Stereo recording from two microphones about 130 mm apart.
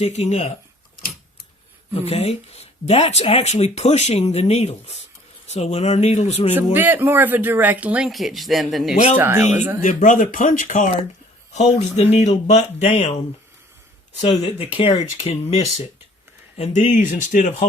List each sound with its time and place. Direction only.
0.0 s speech: 60° left (ahead or behind)
2.0 s speech: 55° left (ahead or behind)
6.7 s speech: 15° right (ahead or behind); by 9.0 s centre (ahead or behind)
9.1 s speech: 15° right (ahead or behind)
9.8 s speech: 80° left
11.5 s speech: 60° left (ahead or behind)
14.2 s speech: 50° left (ahead or behind)
16.6 s speech: 65° left (ahead or behind); by 17.7 s 80° left